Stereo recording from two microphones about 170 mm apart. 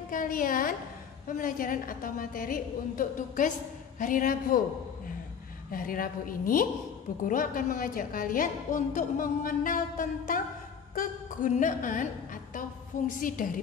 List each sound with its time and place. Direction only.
0.1 s a woman's voice: 55° left (ahead or behind)
5.7 s a woman's voice: 55° left (ahead or behind)